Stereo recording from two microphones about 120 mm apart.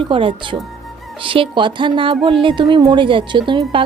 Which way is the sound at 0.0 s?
50° right (ahead or behind).